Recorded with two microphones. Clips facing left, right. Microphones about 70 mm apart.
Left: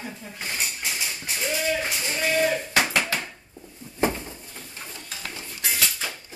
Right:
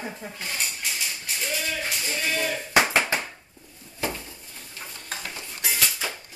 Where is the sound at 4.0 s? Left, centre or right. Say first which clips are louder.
Left 6 dB; left.